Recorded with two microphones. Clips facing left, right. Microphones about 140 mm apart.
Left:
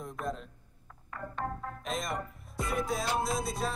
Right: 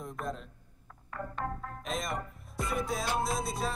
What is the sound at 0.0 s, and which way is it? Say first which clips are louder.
Speech: left 1 dB; centre (ahead or behind).